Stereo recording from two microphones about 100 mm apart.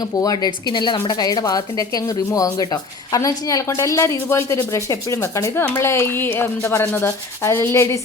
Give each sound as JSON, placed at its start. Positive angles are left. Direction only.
{"t": 0.2, "sound": "a woman's voice", "side_deg": 40}
{"t": 0.7, "sound": "a woman's voice", "side_deg": 50}